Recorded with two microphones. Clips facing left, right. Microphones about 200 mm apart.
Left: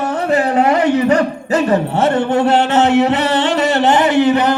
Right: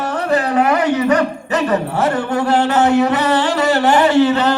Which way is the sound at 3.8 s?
20° left (ahead or behind).